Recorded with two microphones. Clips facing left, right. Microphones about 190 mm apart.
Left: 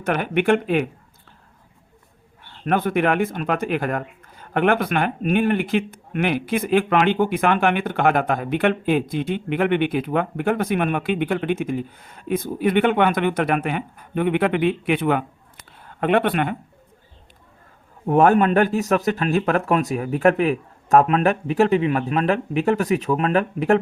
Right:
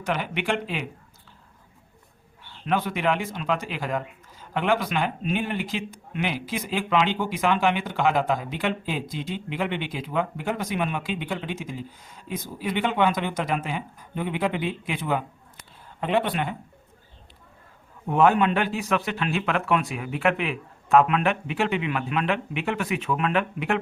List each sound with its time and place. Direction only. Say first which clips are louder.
0.0 s speech: left 7 dB; 55° left (ahead or behind)
2.4 s speech: left 4 dB; 50° left (ahead or behind)
18.1 s a man's voice: left 4 dB; 50° left (ahead or behind)